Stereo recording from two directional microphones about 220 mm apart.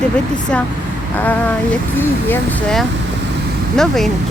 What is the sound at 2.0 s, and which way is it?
Speech, 10° left (ahead or behind).